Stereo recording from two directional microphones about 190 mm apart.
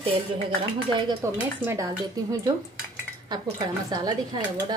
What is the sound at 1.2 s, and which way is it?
Speech, 15° right (ahead or behind).